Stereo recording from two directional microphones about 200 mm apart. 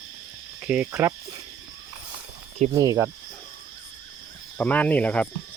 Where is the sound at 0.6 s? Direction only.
5° right (ahead or behind).